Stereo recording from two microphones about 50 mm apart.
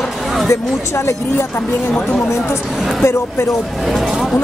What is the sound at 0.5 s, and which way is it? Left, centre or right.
Speech, left.